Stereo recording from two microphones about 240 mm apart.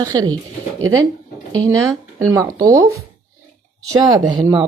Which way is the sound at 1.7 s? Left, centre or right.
Centre.